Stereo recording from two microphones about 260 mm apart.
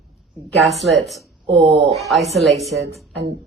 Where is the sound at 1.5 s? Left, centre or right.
Right.